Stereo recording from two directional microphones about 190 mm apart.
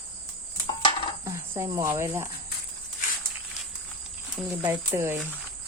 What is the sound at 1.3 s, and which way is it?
Speech, 15° right (ahead or behind).